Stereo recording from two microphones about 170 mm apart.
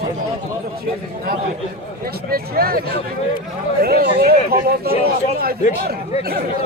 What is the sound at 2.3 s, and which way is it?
Speech, 60° right (ahead or behind).